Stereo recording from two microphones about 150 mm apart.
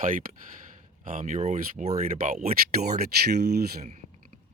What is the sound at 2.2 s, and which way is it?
Speech, 60° right (ahead or behind).